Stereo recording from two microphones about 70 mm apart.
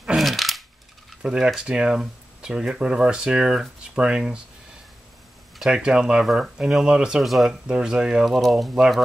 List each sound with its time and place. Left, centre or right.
0.0 s a sound: centre
1.2 s speech: centre
5.6 s speech: centre
8.3 s speech: centre